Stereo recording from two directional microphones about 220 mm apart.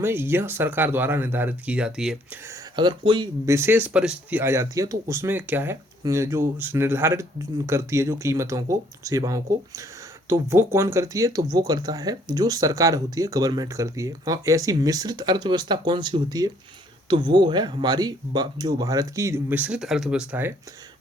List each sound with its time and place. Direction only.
0.0 s speech: 10° right (ahead or behind)
2.5 s speech: 20° right (ahead or behind)